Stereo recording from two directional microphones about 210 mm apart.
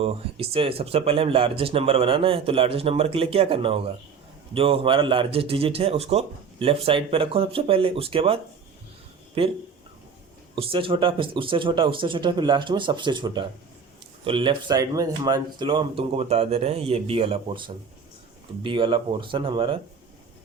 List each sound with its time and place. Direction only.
0.0 s speech: 25° right (ahead or behind)
9.4 s speech: 30° right (ahead or behind)